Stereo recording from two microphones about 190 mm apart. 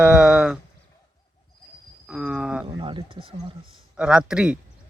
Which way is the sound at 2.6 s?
25° right (ahead or behind).